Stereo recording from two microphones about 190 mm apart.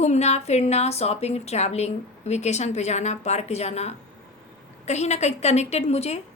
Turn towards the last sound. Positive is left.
turn(degrees=35)  # may be behind; listen again after turning